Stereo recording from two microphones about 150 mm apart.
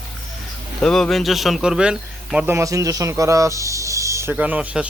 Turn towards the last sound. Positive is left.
turn(degrees=-10)  # may be behind; listen again after turning